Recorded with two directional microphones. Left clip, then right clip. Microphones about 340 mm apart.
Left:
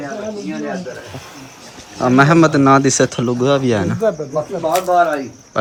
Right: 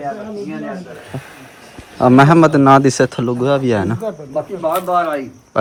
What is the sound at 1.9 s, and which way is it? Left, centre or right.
A man's voice, centre.